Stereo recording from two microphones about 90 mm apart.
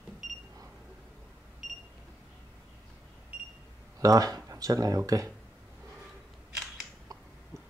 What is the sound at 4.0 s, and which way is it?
Speech, 40° right (ahead or behind).